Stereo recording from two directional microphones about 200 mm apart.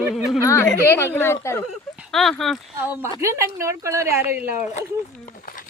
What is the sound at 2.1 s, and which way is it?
Speech, centre (ahead or behind).